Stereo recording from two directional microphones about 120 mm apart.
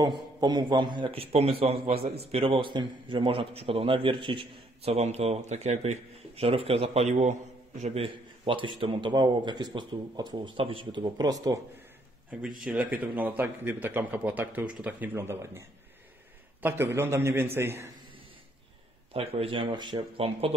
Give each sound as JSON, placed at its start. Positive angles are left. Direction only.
{"t": 0.0, "sound": "a man's voice", "side_deg": -35}
{"t": 12.3, "sound": "a man's voice", "side_deg": -10}
{"t": 16.6, "sound": "a man's voice", "side_deg": -20}
{"t": 19.1, "sound": "a man's voice", "side_deg": -50}